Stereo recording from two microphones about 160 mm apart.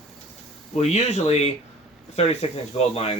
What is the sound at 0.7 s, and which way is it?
Speech, 45° left (ahead or behind).